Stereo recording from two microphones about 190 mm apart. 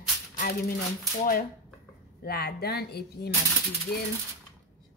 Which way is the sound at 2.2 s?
55° left (ahead or behind).